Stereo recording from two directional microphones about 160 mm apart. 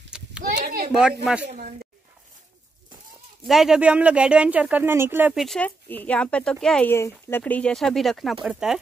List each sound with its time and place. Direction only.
0.4 s a sound: 65° right (ahead or behind)
3.4 s speech: centre (ahead or behind)
5.3 s speech: centre (ahead or behind)